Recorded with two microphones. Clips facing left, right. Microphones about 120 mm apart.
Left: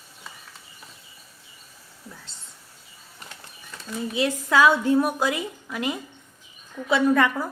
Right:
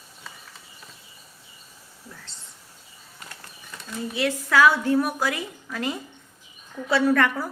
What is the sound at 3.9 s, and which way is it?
A woman's voice, 20° left (ahead or behind).